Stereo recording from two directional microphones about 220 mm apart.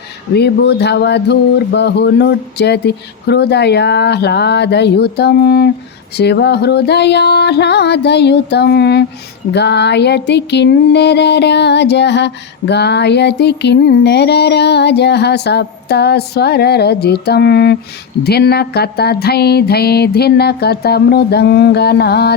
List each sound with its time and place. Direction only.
0.3 s music: 50° left (ahead or behind)